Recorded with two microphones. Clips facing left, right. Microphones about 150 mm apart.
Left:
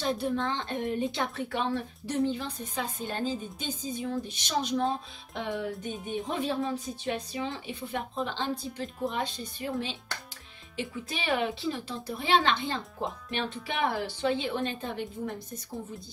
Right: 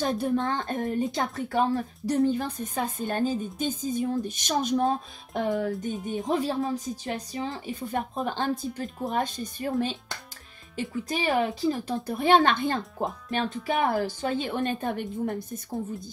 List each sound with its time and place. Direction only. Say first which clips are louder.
0.0 s speech: right 3 dB; 45° right (ahead or behind)
5.7 s speech: right 4 dB; centre (ahead or behind)
6.2 s speech: right 4 dB; 40° right (ahead or behind)